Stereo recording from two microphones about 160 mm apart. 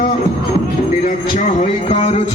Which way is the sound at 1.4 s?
45° left (ahead or behind).